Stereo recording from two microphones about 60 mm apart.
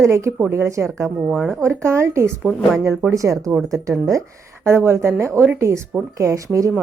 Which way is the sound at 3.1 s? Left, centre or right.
Right.